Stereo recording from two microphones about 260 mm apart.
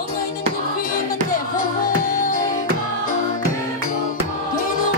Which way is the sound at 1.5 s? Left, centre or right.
Left.